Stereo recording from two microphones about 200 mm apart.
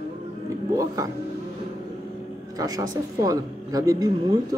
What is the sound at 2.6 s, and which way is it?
A woman's voice, 15° right (ahead or behind).